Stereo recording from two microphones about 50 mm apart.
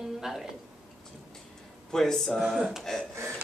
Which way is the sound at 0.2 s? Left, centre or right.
Centre.